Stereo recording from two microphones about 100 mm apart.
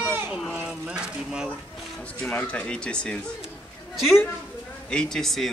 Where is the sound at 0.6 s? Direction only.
10° right (ahead or behind).